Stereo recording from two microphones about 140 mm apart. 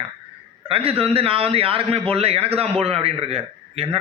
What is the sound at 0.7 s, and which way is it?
A man's voice, 45° right (ahead or behind).